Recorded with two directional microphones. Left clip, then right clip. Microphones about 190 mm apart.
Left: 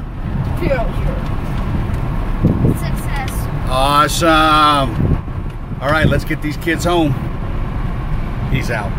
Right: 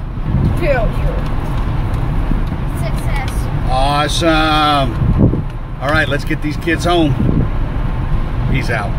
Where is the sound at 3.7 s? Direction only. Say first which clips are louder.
Left 2 dB; 40° left (ahead or behind).